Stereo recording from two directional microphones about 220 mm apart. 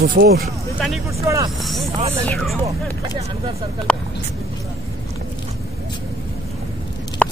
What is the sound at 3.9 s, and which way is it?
Speech, 5° left (ahead or behind).